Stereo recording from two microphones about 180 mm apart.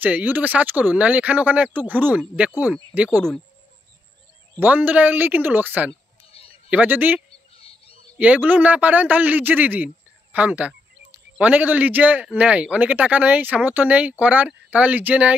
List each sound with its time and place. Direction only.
0.0 s a man's voice: 10° right (ahead or behind)
4.6 s a man's voice: 10° right (ahead or behind)
6.4 s a sound: 30° left (ahead or behind)
6.7 s a man's voice: 10° right (ahead or behind)
7.2 s bird: 35° left (ahead or behind)
8.2 s a man's voice: 10° right (ahead or behind)